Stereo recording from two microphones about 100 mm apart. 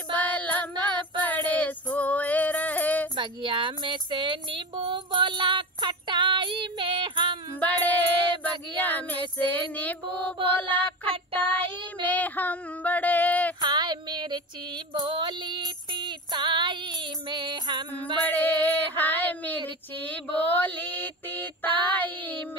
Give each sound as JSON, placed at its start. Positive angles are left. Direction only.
{"t": 0.1, "sound": "child singing", "side_deg": 15}
{"t": 2.0, "sound": "music", "side_deg": 15}
{"t": 3.2, "sound": "a sound", "side_deg": -55}
{"t": 7.6, "sound": "mantra", "side_deg": 15}
{"t": 10.7, "sound": "child singing", "side_deg": 15}
{"t": 13.6, "sound": "a sound", "side_deg": -45}
{"t": 15.0, "sound": "female singing", "side_deg": -50}
{"t": 18.3, "sound": "music", "side_deg": 15}
{"t": 20.0, "sound": "mantra", "side_deg": 15}
{"t": 21.8, "sound": "child singing", "side_deg": 20}